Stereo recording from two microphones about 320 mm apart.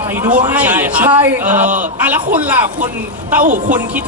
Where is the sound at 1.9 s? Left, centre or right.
Centre.